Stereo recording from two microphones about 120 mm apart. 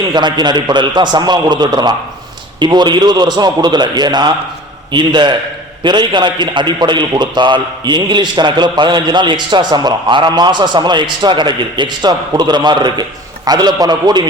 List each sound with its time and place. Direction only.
0.1 s a man's voice: 35° right (ahead or behind)